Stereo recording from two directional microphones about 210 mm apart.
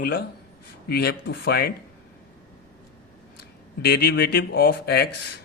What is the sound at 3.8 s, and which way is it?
Speech, 45° left (ahead or behind).